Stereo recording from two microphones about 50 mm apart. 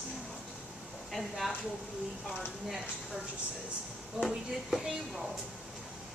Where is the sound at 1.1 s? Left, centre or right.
Centre.